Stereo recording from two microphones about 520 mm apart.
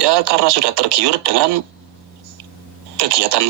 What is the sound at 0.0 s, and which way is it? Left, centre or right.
A man's voice, right.